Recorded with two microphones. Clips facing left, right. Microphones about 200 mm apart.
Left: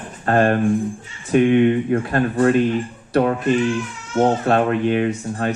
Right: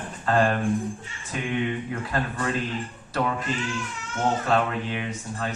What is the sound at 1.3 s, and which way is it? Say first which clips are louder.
Speech: left 13 dB; 60° left (ahead or behind).